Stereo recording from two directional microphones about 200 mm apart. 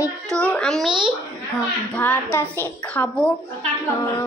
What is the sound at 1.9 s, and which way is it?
A woman's voice, 10° left (ahead or behind).